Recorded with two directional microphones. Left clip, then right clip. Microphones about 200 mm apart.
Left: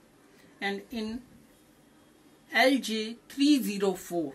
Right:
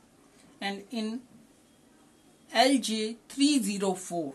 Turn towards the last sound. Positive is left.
turn(degrees=-20)  # may be behind; listen again after turning